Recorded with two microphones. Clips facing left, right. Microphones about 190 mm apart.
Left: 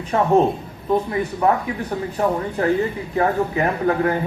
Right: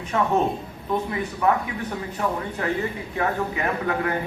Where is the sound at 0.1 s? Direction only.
35° left (ahead or behind).